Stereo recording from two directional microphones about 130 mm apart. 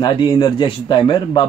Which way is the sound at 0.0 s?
40° left (ahead or behind).